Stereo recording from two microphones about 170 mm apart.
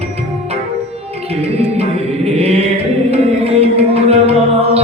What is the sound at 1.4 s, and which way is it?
Music, 35° right (ahead or behind).